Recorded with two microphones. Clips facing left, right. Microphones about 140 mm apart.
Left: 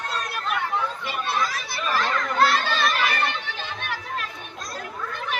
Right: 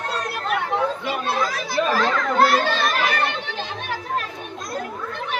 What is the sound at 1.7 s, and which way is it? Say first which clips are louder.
Children playing: right 7 dB; 90° right.